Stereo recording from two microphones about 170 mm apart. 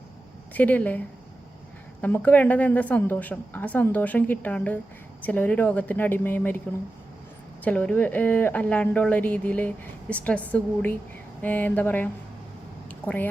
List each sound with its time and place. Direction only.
0.5 s speech: 10° left (ahead or behind)
7.6 s speech: 10° left (ahead or behind)
12.9 s a sound: 10° left (ahead or behind)